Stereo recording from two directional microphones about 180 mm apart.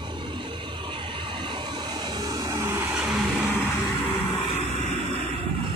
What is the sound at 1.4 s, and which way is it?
Vehicle, 25° right (ahead or behind).